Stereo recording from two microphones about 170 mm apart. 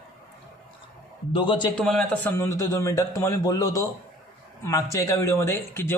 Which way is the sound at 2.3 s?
15° left (ahead or behind).